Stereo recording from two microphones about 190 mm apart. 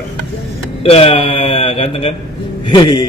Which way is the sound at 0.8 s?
30° left (ahead or behind).